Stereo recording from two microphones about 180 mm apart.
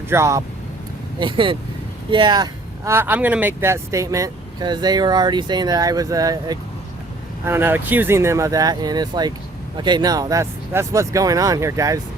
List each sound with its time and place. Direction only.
0.1 s speech: 15° right (ahead or behind)
1.2 s speech: 30° right (ahead or behind)